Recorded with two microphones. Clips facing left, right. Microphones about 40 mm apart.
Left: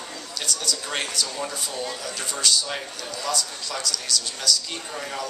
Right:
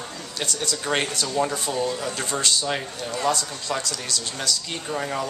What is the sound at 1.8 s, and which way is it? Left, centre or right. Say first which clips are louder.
Speech: right 4 dB; right.